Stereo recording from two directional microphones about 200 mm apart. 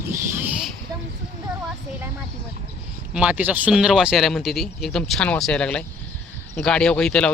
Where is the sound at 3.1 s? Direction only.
5° right (ahead or behind).